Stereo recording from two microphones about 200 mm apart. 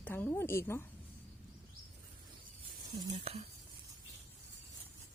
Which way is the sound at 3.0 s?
30° right (ahead or behind).